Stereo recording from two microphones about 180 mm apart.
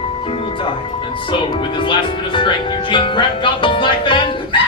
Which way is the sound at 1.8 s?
25° left (ahead or behind).